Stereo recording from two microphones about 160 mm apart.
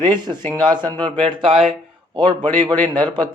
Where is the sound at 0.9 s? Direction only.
5° left (ahead or behind).